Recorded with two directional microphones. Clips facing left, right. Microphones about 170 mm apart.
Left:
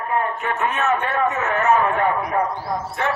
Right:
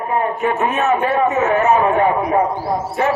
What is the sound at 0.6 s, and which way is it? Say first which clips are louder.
A man's voice: right 3 dB; 20° right (ahead or behind).